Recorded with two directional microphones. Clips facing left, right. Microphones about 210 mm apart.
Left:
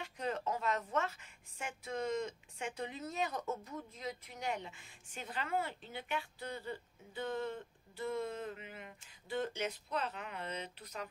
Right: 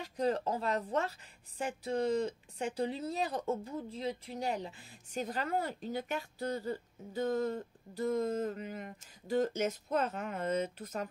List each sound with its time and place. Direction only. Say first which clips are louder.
0.0 s speech: right 6 dB; 35° right (ahead or behind)